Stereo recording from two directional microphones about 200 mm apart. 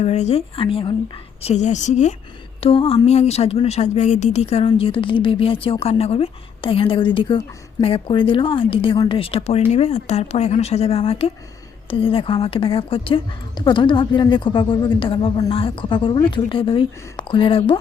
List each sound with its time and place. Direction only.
0.0 s a woman's voice: 30° left (ahead or behind)